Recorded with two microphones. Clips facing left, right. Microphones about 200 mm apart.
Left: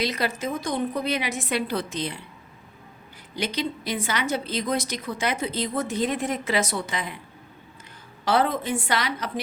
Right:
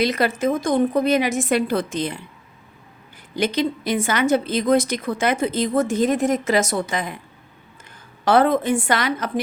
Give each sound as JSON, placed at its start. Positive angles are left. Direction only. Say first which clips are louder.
{"t": 0.0, "sound": "a woman's voice", "louder": "right 7 dB", "side_deg": -55}
{"t": 3.3, "sound": "a woman's voice", "louder": "right 7 dB", "side_deg": -50}
{"t": 8.2, "sound": "a woman's voice", "louder": "right 6 dB", "side_deg": -50}